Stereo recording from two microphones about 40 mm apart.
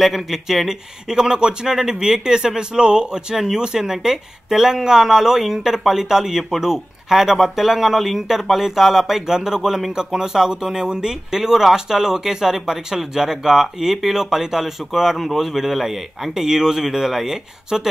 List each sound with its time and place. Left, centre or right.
0.0 s speech: centre